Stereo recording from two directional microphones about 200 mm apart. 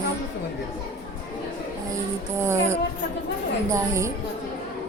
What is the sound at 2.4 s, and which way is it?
A woman's voice, 15° right (ahead or behind).